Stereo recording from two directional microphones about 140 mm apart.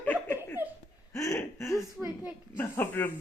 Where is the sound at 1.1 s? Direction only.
20° left (ahead or behind).